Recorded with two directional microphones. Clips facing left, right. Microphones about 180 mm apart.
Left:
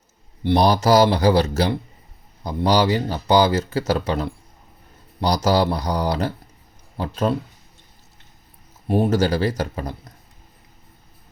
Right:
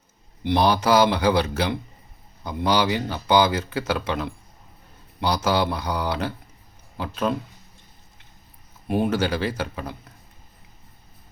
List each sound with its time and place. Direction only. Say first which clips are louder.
0.4 s speech: left 3 dB; 35° left (ahead or behind)
8.9 s speech: left 4 dB; 40° left (ahead or behind)